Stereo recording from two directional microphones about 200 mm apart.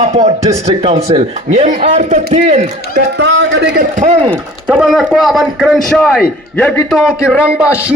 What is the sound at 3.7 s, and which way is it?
Speech, 40° right (ahead or behind).